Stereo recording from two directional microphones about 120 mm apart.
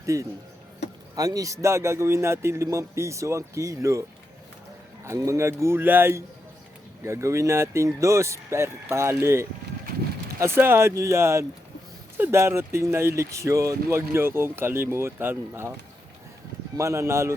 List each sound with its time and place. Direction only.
0.0 s speech: 25° right (ahead or behind)
5.0 s speech: 25° right (ahead or behind)
16.7 s speech: 25° right (ahead or behind)